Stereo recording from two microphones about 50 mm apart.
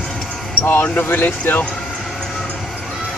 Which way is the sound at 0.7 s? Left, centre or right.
Left.